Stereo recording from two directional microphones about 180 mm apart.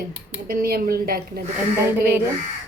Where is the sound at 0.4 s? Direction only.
55° right (ahead or behind).